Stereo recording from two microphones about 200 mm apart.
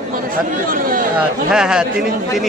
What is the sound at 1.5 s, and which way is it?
Speech, 5° right (ahead or behind).